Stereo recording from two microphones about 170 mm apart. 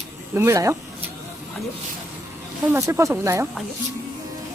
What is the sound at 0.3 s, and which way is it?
Speech, 15° right (ahead or behind).